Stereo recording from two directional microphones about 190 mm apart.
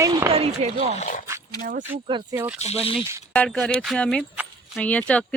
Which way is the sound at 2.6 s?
30° left (ahead or behind).